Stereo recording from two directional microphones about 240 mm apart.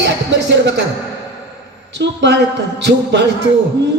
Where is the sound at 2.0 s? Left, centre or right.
Right.